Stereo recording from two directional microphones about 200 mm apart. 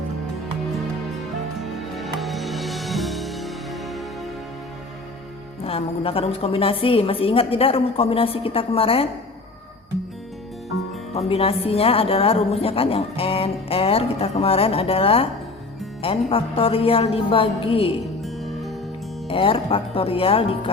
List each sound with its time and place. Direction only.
1.5 s music: centre (ahead or behind)
5.6 s a woman's voice: 30° left (ahead or behind)
11.1 s a woman's voice: 30° left (ahead or behind)
18.0 s music: centre (ahead or behind)
19.3 s a woman's voice: 25° left (ahead or behind)